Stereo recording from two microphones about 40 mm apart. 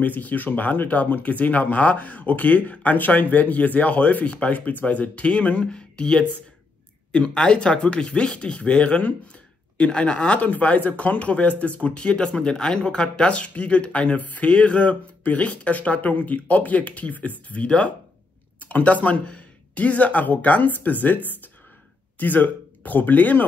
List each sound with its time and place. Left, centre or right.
0.0 s speech: left
14.5 s speech: left
22.2 s speech: left